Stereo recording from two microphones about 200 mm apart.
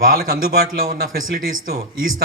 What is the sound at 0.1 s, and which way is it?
A man's voice, 50° right (ahead or behind).